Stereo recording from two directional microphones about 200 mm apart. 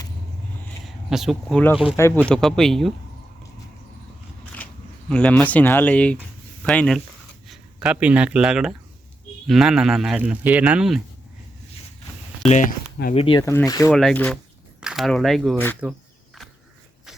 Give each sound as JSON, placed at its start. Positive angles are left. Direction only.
{"t": 0.9, "sound": "a man's voice", "side_deg": 0}
{"t": 2.0, "sound": "speech", "side_deg": 15}
{"t": 2.3, "sound": "a man's voice", "side_deg": 0}
{"t": 4.5, "sound": "a man's voice", "side_deg": 5}
{"t": 12.5, "sound": "speech", "side_deg": 40}
{"t": 13.1, "sound": "speech", "side_deg": 25}
{"t": 13.4, "sound": "speech", "side_deg": 15}
{"t": 13.9, "sound": "a man's voice", "side_deg": 5}
{"t": 15.8, "sound": "insect", "side_deg": 0}